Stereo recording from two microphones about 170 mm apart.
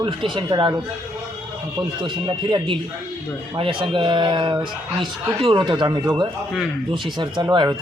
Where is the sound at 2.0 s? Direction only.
25° right (ahead or behind).